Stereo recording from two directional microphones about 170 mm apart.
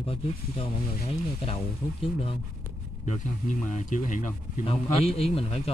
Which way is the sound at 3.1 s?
45° left (ahead or behind).